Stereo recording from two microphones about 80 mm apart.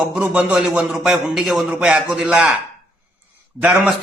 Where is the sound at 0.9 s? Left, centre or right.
Centre.